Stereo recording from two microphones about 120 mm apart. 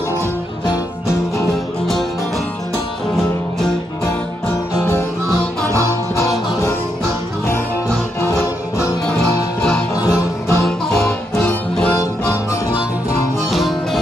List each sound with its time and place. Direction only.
5.9 s music: 25° left (ahead or behind)
8.2 s music: 20° left (ahead or behind)
9.6 s music: 10° left (ahead or behind)
9.9 s music: 30° left (ahead or behind)
11.9 s harmonica: 25° left (ahead or behind)
13.5 s music: centre (ahead or behind)